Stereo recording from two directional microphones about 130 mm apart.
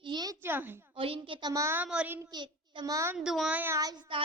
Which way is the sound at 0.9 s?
45° right (ahead or behind).